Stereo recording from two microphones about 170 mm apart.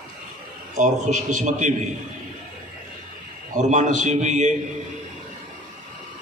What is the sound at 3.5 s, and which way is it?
Speech, 45° right (ahead or behind).